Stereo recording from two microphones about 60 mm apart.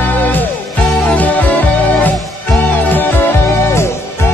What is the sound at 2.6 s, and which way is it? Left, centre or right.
Music, left.